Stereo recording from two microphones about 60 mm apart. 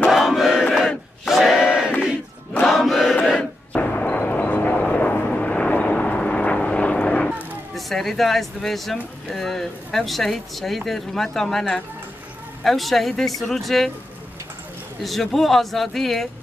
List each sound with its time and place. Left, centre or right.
0.1 s battle cry: centre
2.6 s chant: centre
3.3 s a sound: left
7.7 s speech: centre
15.0 s speech: centre